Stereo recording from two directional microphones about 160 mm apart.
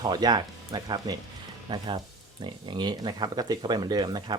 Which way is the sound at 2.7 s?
30° right (ahead or behind).